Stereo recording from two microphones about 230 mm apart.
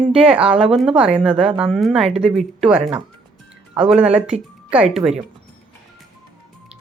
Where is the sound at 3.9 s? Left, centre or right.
Centre.